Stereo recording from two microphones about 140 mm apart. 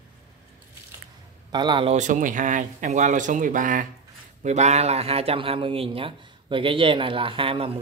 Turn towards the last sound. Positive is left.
turn(degrees=-40)  # may be behind; listen again after turning